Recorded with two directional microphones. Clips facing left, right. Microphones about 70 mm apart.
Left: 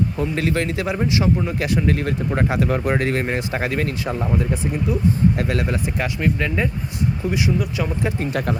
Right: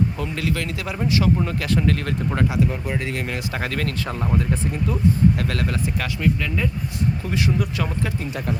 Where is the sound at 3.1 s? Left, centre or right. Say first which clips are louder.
Left 5 dB; left.